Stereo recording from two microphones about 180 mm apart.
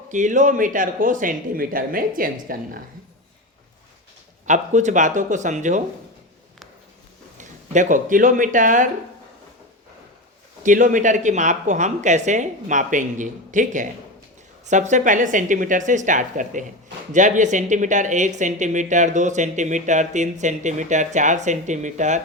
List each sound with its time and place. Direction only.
0.1 s speech: 45° right (ahead or behind)
4.4 s speech: 40° right (ahead or behind)
7.3 s speech: 45° right (ahead or behind)
10.6 s speech: 45° right (ahead or behind)